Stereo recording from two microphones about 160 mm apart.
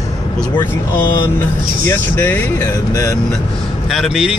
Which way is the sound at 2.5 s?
25° left (ahead or behind).